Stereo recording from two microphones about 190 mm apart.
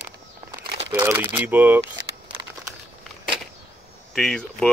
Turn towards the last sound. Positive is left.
turn(degrees=5)  # may be behind; listen again after turning